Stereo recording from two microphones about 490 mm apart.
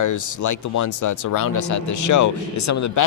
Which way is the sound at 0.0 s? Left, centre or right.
Left.